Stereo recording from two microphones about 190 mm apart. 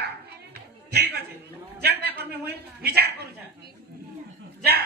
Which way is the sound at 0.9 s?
60° right (ahead or behind).